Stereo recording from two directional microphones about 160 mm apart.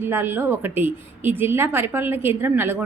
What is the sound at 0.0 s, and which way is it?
A woman's voice, 15° right (ahead or behind).